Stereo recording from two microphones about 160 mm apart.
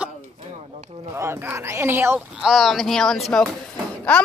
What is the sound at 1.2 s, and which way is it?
A woman's voice, 15° right (ahead or behind).